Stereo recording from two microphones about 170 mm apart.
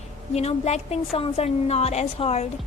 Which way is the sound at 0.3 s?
40° left (ahead or behind).